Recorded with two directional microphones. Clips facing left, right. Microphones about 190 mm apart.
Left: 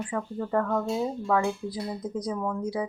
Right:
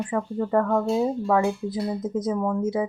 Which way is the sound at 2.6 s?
25° right (ahead or behind).